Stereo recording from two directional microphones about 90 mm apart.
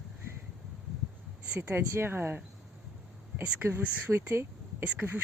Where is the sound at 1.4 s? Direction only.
15° right (ahead or behind).